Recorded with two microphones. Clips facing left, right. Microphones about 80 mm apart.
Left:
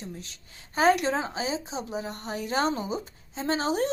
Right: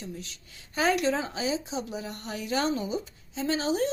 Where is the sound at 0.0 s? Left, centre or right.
Left.